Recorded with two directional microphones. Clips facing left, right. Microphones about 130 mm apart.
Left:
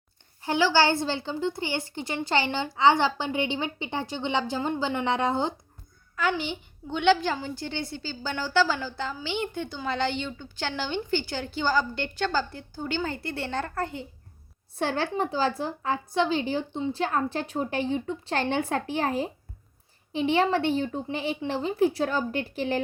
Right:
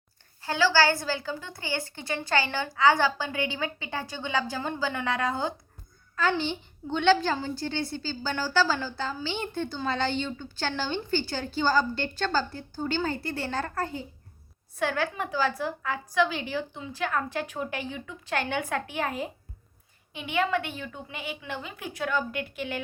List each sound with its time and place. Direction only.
0.4 s a woman's voice: 20° left (ahead or behind)